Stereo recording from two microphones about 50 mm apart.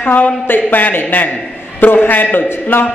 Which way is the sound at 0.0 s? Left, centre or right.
Left.